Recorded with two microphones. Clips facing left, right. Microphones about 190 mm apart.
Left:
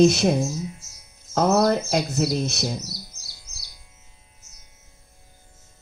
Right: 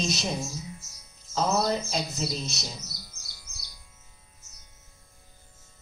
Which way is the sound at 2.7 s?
20° left (ahead or behind).